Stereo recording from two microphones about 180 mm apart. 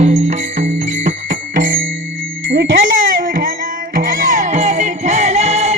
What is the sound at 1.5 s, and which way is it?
Music, 50° right (ahead or behind).